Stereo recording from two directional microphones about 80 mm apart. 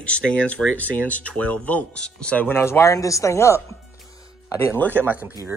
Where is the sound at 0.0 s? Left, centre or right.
Centre; by 3.6 s left.